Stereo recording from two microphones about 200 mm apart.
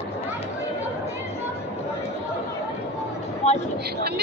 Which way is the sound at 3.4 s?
35° left (ahead or behind).